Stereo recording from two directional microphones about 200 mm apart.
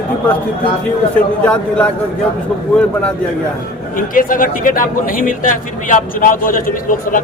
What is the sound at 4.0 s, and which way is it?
A man's voice, 45° left (ahead or behind).